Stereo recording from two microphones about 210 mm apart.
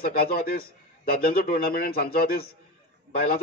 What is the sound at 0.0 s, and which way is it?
A man's voice, 45° left (ahead or behind).